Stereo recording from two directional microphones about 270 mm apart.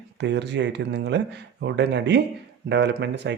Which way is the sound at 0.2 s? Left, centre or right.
Right.